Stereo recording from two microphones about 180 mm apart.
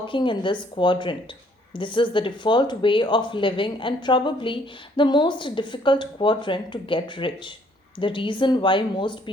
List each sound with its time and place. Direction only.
0.0 s speech: 25° left (ahead or behind)